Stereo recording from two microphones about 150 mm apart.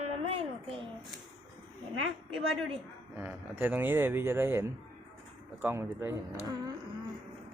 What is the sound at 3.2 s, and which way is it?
Speech, 15° right (ahead or behind).